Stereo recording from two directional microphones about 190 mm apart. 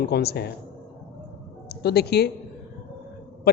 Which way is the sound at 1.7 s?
55° left (ahead or behind).